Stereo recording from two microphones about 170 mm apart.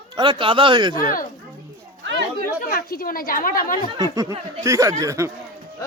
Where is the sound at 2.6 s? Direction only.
60° left (ahead or behind).